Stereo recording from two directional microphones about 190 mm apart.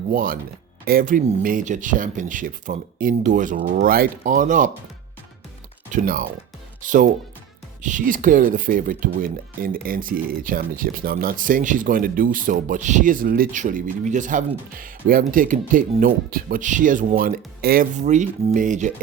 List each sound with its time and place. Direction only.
0.1 s speech: 50° right (ahead or behind)
5.9 s speech: 45° right (ahead or behind)